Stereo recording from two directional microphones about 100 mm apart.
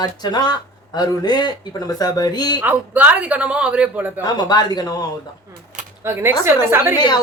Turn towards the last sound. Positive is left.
turn(degrees=45)  # may be behind; listen again after turning